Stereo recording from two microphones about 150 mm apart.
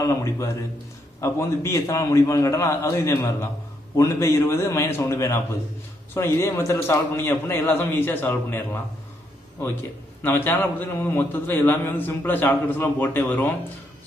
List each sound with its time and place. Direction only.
0.0 s a man's voice: 20° left (ahead or behind)
10.2 s a man's voice: 15° left (ahead or behind)